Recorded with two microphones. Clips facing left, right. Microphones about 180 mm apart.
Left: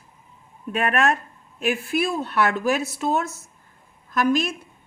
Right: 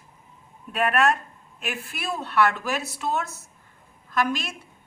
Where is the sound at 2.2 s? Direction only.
45° left (ahead or behind).